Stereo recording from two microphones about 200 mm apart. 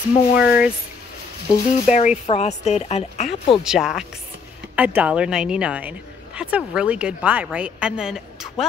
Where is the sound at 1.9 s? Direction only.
35° left (ahead or behind).